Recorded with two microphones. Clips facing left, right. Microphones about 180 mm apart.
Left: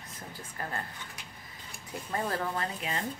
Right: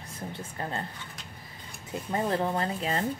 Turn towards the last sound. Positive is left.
turn(degrees=-35)  # may be behind; listen again after turning